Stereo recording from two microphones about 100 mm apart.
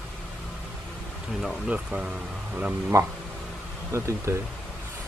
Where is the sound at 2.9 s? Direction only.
30° right (ahead or behind).